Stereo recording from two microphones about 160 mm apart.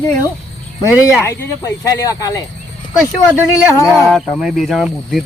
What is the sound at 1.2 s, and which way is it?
Speech, 20° left (ahead or behind).